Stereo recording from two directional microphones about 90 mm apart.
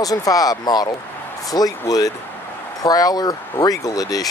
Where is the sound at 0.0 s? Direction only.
40° left (ahead or behind).